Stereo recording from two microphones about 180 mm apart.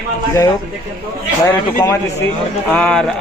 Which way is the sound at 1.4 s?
20° left (ahead or behind).